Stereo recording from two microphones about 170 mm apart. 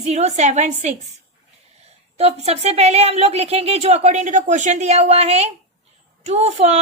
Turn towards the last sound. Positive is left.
turn(degrees=-40)  # may be behind; listen again after turning